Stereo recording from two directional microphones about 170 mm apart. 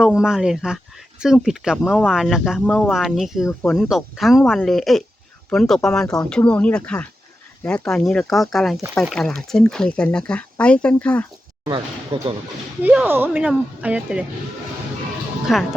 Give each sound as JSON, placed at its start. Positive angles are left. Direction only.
{"t": 0.2, "sound": "speech", "side_deg": -5}
{"t": 11.6, "sound": "speech", "side_deg": -25}
{"t": 12.8, "sound": "speech", "side_deg": -10}
{"t": 15.5, "sound": "speech", "side_deg": 0}